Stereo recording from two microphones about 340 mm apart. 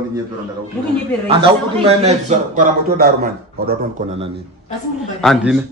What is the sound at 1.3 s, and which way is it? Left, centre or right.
A man's voice, centre.